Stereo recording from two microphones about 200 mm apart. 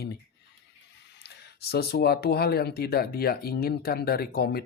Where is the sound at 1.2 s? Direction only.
55° left (ahead or behind).